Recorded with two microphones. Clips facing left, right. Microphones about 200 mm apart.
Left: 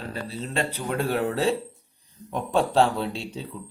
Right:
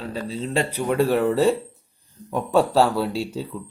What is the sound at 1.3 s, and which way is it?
Speech, centre (ahead or behind).